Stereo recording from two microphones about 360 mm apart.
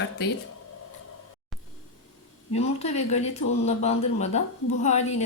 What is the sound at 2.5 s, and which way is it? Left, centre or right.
Speech, centre.